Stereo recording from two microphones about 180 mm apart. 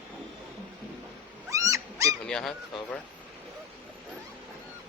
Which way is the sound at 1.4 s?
15° right (ahead or behind).